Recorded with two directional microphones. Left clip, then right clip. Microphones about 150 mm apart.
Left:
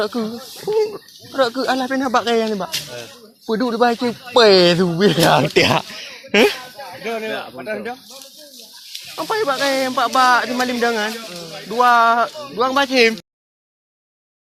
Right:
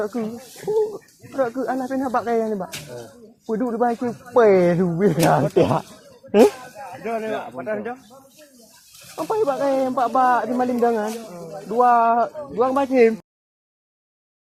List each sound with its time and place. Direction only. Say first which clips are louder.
0.0 s speech: left 4 dB; 40° left (ahead or behind)
5.5 s speech: left 3 dB; 25° left (ahead or behind)
7.0 s speech: left 1 dB; 85° left
9.1 s speech: left 2 dB; 5° left (ahead or behind)
12.9 s speech: even; centre (ahead or behind)